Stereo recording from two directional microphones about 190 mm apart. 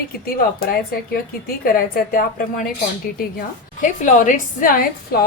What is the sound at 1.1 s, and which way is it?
A woman's voice, 50° left (ahead or behind).